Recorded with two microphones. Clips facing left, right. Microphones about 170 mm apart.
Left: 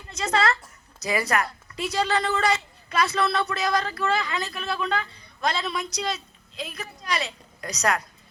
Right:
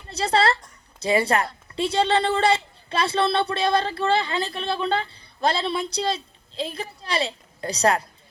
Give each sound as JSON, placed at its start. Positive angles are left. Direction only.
{"t": 0.1, "sound": "a woman's voice", "side_deg": -35}